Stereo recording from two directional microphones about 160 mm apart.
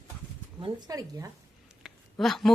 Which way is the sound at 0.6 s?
25° right (ahead or behind).